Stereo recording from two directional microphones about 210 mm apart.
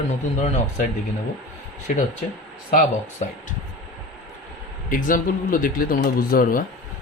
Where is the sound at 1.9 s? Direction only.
35° left (ahead or behind).